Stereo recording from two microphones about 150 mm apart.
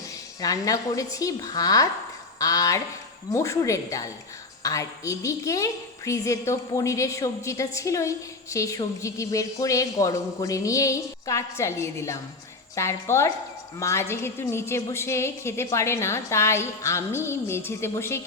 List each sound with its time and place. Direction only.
0.4 s a woman's voice: 25° left (ahead or behind)